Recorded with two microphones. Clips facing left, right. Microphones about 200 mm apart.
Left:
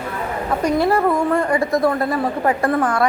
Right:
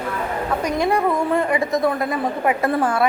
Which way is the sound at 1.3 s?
20° right (ahead or behind).